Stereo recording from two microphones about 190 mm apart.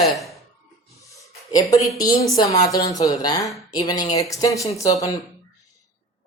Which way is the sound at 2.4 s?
20° left (ahead or behind).